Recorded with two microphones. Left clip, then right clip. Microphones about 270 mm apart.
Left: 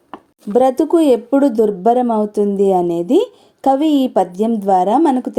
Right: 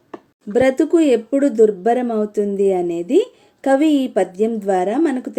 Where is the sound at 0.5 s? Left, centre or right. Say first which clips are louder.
Left 2 dB; centre.